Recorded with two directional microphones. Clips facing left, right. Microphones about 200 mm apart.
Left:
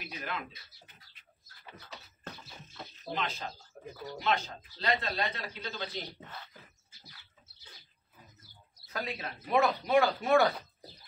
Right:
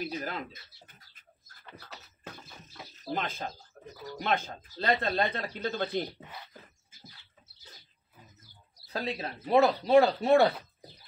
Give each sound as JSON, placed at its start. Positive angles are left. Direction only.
{"t": 0.0, "sound": "speech", "side_deg": -35}
{"t": 3.1, "sound": "speech", "side_deg": -50}
{"t": 3.8, "sound": "bird", "side_deg": 10}
{"t": 4.2, "sound": "speech", "side_deg": -50}
{"t": 6.2, "sound": "speech", "side_deg": -15}
{"t": 8.8, "sound": "speech", "side_deg": -35}